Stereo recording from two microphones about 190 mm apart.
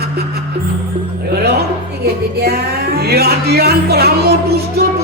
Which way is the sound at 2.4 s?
55° right (ahead or behind).